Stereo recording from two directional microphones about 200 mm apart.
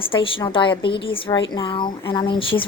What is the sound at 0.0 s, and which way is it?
A woman's voice, 25° left (ahead or behind).